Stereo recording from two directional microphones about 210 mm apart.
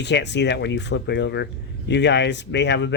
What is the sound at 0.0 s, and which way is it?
A man's voice, 55° left (ahead or behind).